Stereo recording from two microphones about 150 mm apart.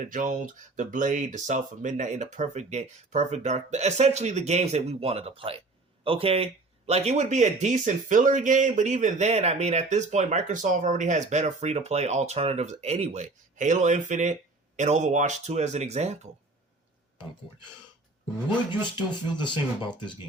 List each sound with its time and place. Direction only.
0.0 s speech: 60° right (ahead or behind)
19.1 s speech: 30° left (ahead or behind)